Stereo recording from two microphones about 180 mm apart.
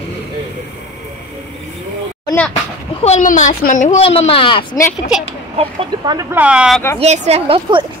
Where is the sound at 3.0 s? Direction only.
40° left (ahead or behind).